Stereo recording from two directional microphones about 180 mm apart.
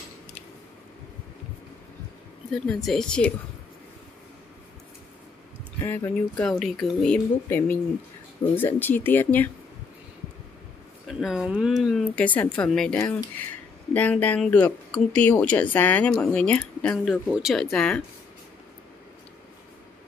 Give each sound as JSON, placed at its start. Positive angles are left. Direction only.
{"t": 2.7, "sound": "speech", "side_deg": 0}
{"t": 5.9, "sound": "speech", "side_deg": 10}
{"t": 11.1, "sound": "speech", "side_deg": 0}
{"t": 13.0, "sound": "speech", "side_deg": 20}